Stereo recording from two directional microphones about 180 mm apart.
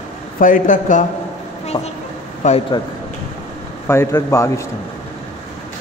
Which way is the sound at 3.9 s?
15° left (ahead or behind).